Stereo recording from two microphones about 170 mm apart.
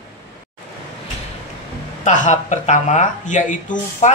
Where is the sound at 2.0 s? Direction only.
45° left (ahead or behind).